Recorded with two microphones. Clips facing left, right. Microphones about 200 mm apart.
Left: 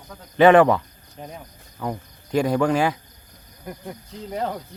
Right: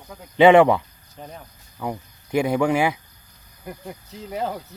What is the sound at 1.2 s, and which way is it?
Speech, 5° left (ahead or behind).